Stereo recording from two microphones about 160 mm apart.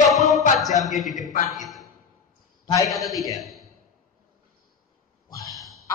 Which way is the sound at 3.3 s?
Centre (ahead or behind).